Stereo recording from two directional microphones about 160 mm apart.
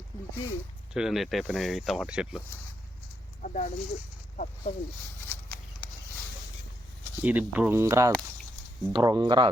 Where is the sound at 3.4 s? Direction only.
55° left (ahead or behind).